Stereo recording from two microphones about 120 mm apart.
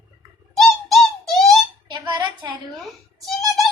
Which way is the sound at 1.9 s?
40° right (ahead or behind).